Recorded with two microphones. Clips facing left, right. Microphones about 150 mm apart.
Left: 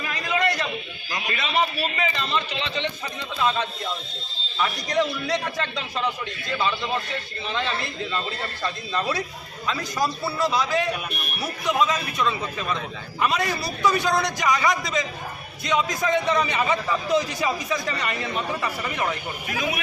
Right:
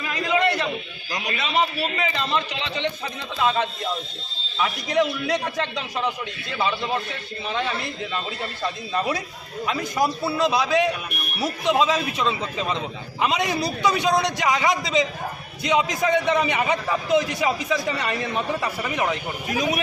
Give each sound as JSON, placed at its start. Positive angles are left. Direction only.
{"t": 0.1, "sound": "a sound", "side_deg": -20}
{"t": 1.1, "sound": "speech", "side_deg": -15}
{"t": 4.5, "sound": "speech", "side_deg": -10}
{"t": 7.4, "sound": "a man's voice", "side_deg": -10}
{"t": 19.5, "sound": "speech", "side_deg": -40}